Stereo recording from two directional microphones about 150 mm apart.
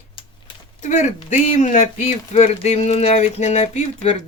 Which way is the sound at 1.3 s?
60° left (ahead or behind).